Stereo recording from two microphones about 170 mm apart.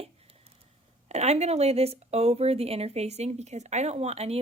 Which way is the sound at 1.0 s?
40° right (ahead or behind).